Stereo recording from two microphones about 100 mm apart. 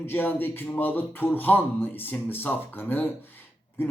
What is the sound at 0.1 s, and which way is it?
Speech, 20° left (ahead or behind).